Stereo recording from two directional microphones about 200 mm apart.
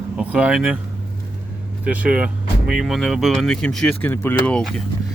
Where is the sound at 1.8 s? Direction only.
5° right (ahead or behind).